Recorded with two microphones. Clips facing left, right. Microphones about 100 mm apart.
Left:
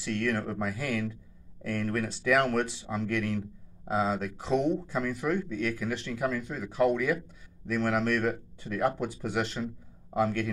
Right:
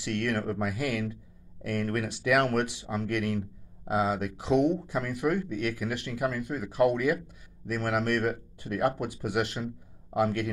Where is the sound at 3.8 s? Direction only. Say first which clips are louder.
Right 1 dB; 10° right (ahead or behind).